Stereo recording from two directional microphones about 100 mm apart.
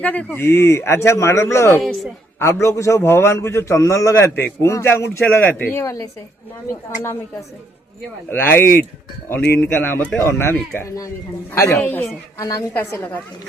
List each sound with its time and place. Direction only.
0.0 s a man's voice: 15° left (ahead or behind)
5.8 s speech: 35° left (ahead or behind)
8.3 s a man's voice: 20° left (ahead or behind)
11.8 s a man's voice: 15° left (ahead or behind)
12.4 s a man's voice: 35° left (ahead or behind)